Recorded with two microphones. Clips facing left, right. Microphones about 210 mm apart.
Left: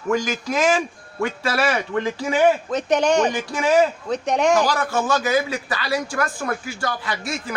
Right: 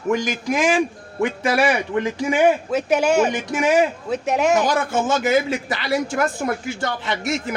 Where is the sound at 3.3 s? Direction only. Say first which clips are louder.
Even; 15° right (ahead or behind).